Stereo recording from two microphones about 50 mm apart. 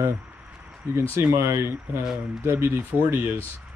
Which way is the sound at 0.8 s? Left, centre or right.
Right.